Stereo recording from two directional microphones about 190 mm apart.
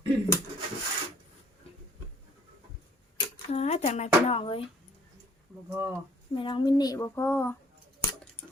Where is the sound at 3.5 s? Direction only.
35° left (ahead or behind).